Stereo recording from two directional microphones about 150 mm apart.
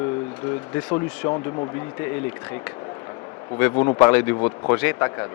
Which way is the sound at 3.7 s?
25° left (ahead or behind).